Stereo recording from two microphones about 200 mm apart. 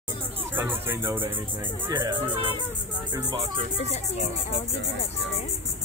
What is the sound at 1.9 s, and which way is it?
Speech, 20° right (ahead or behind).